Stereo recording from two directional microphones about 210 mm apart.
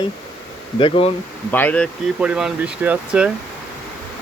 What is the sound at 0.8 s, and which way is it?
Bee, 25° left (ahead or behind).